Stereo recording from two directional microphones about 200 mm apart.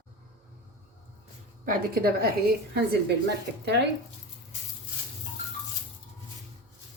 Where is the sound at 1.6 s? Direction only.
45° right (ahead or behind).